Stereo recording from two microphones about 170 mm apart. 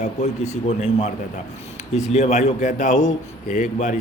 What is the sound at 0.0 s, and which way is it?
A man's voice, 45° left (ahead or behind).